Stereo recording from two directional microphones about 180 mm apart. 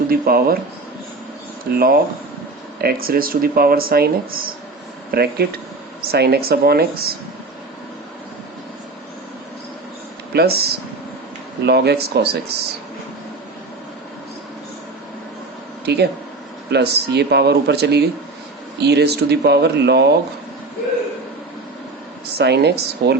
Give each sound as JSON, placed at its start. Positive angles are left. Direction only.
{"t": 0.1, "sound": "speech", "side_deg": -55}
{"t": 1.7, "sound": "speech", "side_deg": -55}
{"t": 10.3, "sound": "speech", "side_deg": -60}
{"t": 15.9, "sound": "speech", "side_deg": -65}
{"t": 22.4, "sound": "speech", "side_deg": -65}